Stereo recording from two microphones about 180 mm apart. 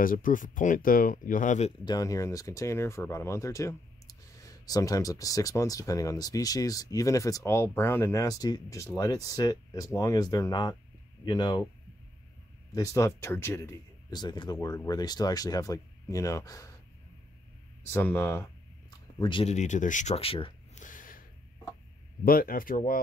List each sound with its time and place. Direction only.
0.0 s speech: 50° left (ahead or behind)
1.9 s speech: 20° left (ahead or behind)
12.7 s speech: 20° left (ahead or behind)
17.8 s speech: 10° left (ahead or behind)
18.9 s a sound: 25° left (ahead or behind)
19.5 s speech: 40° left (ahead or behind)
20.7 s a sound: 45° left (ahead or behind)
22.2 s speech: 55° left (ahead or behind)